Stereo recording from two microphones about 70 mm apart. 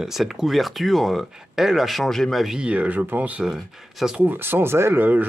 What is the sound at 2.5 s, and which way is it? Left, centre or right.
Speech, centre.